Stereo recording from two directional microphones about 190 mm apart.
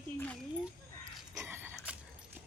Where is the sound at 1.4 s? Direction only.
10° right (ahead or behind).